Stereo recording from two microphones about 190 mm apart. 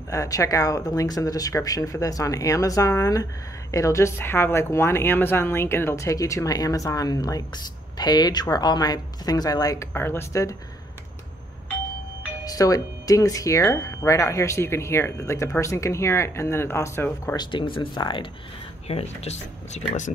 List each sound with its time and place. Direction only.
0.1 s a woman's voice: 15° left (ahead or behind)
12.4 s a woman's voice: 20° left (ahead or behind)
17.5 s speech: 25° left (ahead or behind)